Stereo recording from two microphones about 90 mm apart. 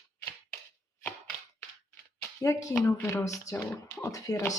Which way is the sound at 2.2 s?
35° left (ahead or behind).